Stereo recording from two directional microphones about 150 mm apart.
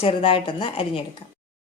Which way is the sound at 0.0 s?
40° left (ahead or behind).